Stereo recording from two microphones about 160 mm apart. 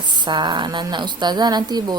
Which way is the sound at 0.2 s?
30° right (ahead or behind).